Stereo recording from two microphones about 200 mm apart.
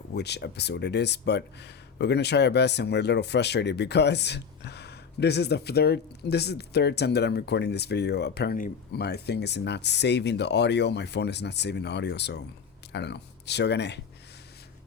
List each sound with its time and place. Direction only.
0.1 s speech: 55° left (ahead or behind)